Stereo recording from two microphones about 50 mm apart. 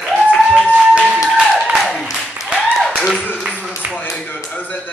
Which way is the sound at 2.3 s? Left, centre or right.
Centre.